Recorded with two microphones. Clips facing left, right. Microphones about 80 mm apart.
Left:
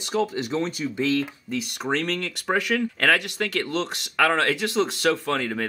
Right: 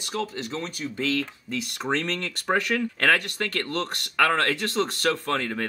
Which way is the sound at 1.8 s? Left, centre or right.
Centre.